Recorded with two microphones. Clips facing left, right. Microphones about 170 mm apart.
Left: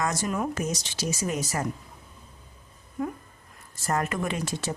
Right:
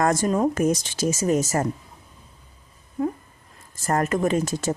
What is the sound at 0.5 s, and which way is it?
Speech, 50° right (ahead or behind).